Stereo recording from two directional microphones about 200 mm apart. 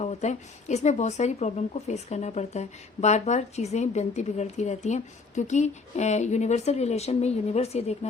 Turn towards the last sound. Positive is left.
turn(degrees=30)  # may be behind; listen again after turning